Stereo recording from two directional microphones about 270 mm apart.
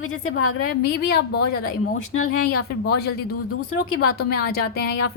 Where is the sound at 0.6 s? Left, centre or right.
Left.